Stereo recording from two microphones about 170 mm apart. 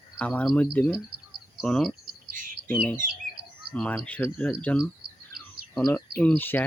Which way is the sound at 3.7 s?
5° left (ahead or behind).